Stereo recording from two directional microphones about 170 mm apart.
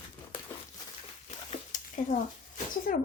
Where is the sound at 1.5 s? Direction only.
50° left (ahead or behind).